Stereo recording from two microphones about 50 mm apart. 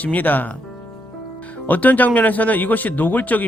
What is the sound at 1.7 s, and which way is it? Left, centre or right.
Speech, left.